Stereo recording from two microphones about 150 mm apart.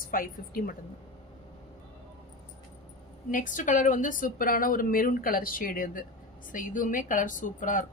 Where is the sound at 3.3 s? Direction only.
60° left (ahead or behind).